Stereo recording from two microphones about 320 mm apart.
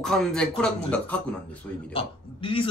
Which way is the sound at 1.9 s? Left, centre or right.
Centre.